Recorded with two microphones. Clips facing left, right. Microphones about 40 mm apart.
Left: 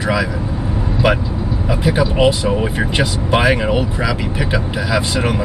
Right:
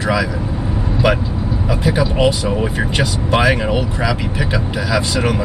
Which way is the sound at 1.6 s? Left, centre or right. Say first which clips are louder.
Left 1 dB; centre.